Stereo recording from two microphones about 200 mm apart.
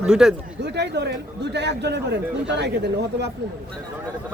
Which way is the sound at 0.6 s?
55° right (ahead or behind).